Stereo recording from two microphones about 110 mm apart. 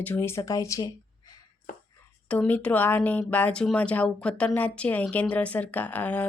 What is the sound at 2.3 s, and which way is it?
Speech, 15° left (ahead or behind).